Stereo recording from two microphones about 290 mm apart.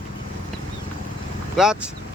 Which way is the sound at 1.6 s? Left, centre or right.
Centre.